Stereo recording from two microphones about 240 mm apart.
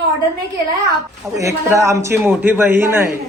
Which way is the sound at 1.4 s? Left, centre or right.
Centre.